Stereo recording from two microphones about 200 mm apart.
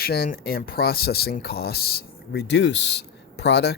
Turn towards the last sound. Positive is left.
turn(degrees=60)  # may be behind; listen again after turning